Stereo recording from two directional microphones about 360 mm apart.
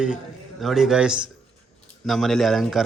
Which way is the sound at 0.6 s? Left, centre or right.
Centre.